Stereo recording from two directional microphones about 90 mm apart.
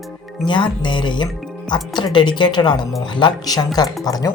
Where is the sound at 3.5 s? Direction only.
45° left (ahead or behind).